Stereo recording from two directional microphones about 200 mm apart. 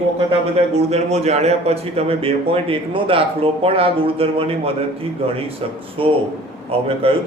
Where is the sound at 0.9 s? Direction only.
35° right (ahead or behind).